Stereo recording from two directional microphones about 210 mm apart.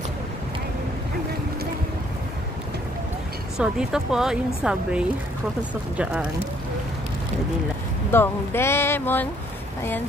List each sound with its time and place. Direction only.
3.5 s speech: 5° right (ahead or behind)
8.1 s speech: 10° left (ahead or behind)